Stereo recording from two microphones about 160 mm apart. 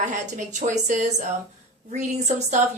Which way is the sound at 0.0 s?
50° right (ahead or behind).